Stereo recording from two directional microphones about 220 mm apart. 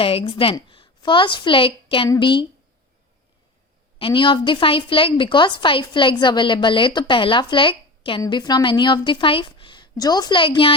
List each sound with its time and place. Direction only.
0.0 s a woman's voice: 25° left (ahead or behind)
3.9 s a woman's voice: 25° left (ahead or behind)